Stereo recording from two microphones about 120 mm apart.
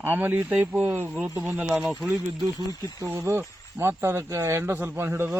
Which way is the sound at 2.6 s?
25° right (ahead or behind).